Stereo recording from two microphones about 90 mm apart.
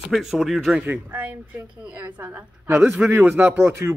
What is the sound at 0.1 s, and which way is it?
A man's voice, 5° right (ahead or behind).